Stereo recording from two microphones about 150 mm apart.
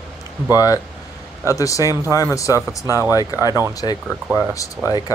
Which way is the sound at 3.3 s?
25° left (ahead or behind).